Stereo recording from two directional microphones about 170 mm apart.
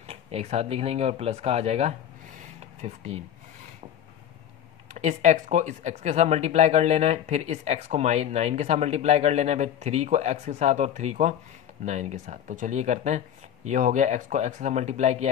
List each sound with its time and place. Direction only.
0.0 s speech: 35° right (ahead or behind)
4.9 s speech: 45° right (ahead or behind)